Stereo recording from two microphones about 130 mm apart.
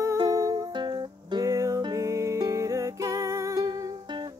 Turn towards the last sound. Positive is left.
turn(degrees=-35)  # may be behind; listen again after turning